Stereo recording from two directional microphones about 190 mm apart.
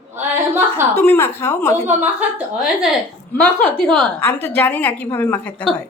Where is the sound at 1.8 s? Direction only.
10° right (ahead or behind).